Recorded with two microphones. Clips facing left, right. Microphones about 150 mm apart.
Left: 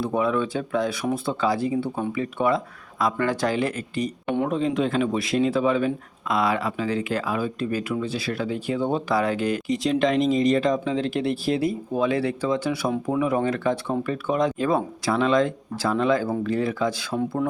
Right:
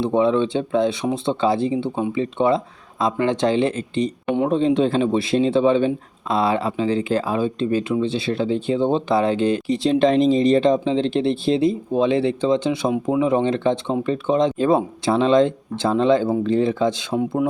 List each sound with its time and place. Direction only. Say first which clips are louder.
0.0 s speech: right 5 dB; 25° right (ahead or behind)